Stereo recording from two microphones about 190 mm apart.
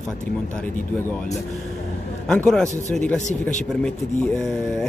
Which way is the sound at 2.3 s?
5° left (ahead or behind).